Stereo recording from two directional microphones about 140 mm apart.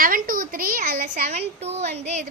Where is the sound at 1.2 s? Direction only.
50° right (ahead or behind).